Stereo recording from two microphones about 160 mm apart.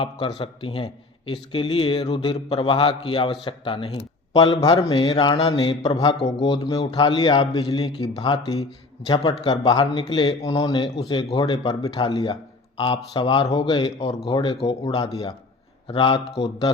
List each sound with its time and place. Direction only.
0.0 s a man's voice: 35° left (ahead or behind)